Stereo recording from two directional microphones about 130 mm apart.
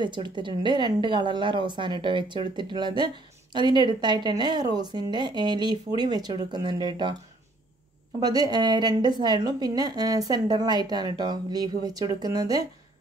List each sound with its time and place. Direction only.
0.0 s a woman's voice: 35° right (ahead or behind)
8.2 s a woman's voice: 30° right (ahead or behind)